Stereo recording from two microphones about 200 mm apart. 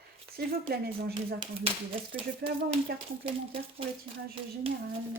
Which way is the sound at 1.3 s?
25° right (ahead or behind).